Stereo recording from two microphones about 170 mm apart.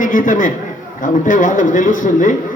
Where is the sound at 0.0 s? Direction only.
55° left (ahead or behind).